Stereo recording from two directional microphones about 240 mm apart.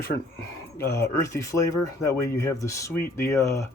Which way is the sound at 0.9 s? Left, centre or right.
Centre.